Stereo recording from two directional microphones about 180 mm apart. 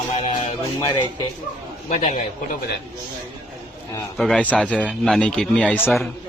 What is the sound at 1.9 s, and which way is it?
Speech, 40° left (ahead or behind).